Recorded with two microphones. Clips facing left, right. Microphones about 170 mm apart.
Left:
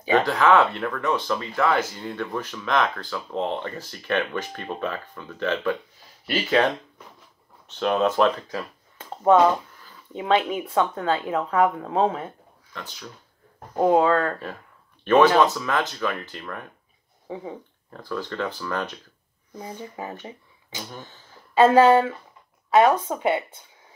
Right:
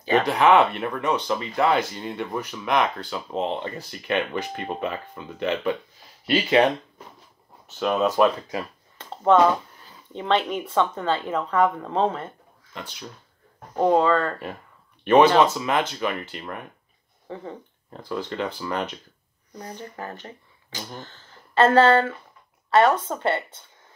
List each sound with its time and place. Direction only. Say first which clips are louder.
0.3 s speech: right 3 dB; 20° right (ahead or behind)
7.6 s speech: left 1 dB; 5° right (ahead or behind)
9.1 s a sound: left 1 dB; 10° left (ahead or behind)
10.1 s speech: left 1 dB; 5° left (ahead or behind)
13.7 s speech: left 1 dB; 5° left (ahead or behind)
15.0 s speech: right 1 dB; 15° right (ahead or behind)
17.3 s speech: left 2 dB; 10° left (ahead or behind)
17.9 s speech: right 1 dB; 20° right (ahead or behind)
19.5 s speech: left 1 dB; 5° left (ahead or behind)